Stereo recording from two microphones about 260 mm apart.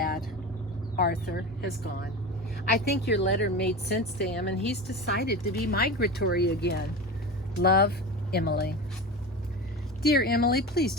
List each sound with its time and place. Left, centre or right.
0.9 s speech: left
2.8 s speech: left
10.0 s speech: left